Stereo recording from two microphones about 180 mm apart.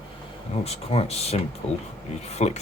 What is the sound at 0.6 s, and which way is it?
Speech, 35° left (ahead or behind).